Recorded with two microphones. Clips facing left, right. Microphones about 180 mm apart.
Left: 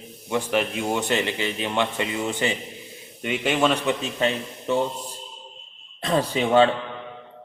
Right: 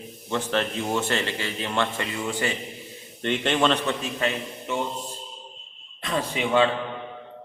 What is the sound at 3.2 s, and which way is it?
Speech, 5° left (ahead or behind).